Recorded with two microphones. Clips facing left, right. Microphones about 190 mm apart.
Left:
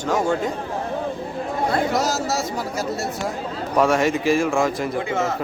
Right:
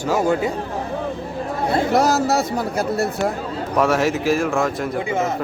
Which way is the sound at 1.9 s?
60° right (ahead or behind).